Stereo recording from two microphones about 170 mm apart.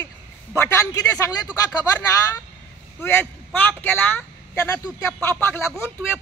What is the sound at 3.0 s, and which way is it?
Speech, 15° left (ahead or behind).